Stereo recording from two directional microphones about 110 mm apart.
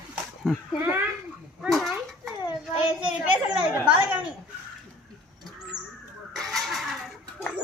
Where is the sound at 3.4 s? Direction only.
5° right (ahead or behind).